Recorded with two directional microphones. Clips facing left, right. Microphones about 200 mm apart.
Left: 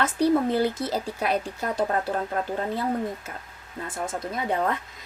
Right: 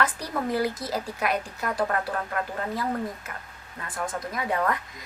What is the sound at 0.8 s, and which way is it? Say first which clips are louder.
Speech: left 2 dB; 30° left (ahead or behind).